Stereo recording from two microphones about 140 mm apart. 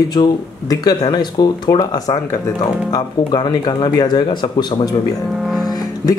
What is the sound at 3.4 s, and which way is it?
Speech, 30° left (ahead or behind).